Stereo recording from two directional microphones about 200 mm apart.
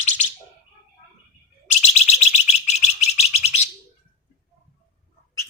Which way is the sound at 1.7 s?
35° left (ahead or behind).